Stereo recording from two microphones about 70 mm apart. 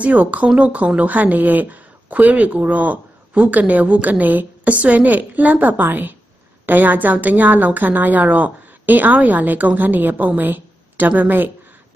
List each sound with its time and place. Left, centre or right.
0.0 s speech: right